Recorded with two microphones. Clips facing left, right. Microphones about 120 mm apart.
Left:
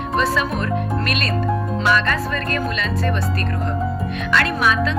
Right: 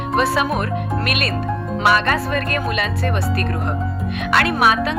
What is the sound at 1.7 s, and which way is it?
Speech, 60° right (ahead or behind).